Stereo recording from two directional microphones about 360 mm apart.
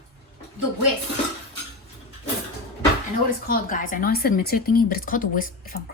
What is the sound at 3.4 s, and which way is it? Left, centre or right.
A woman's voice, left.